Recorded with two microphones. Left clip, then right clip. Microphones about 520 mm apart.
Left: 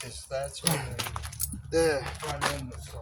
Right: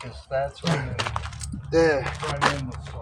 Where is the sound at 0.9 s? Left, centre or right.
Left.